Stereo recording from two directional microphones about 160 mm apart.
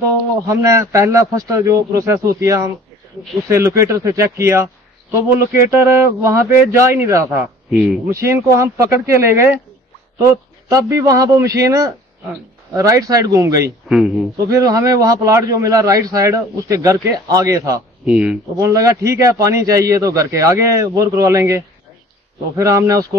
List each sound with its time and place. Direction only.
0.5 s a man's voice: 20° right (ahead or behind)
13.8 s speech: 5° right (ahead or behind)
14.5 s a man's voice: 20° right (ahead or behind)
18.0 s speech: 5° right (ahead or behind)
18.6 s a man's voice: 20° right (ahead or behind)